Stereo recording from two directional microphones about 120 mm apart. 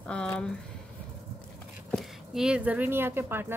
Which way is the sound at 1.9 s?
Centre (ahead or behind).